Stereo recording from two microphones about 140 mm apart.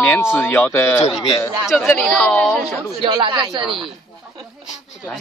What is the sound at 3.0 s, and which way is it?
Speech, 30° right (ahead or behind).